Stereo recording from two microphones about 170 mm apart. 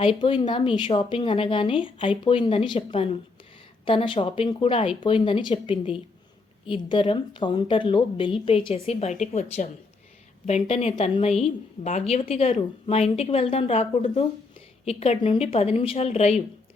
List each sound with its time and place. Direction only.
0.0 s a woman's voice: 30° left (ahead or behind)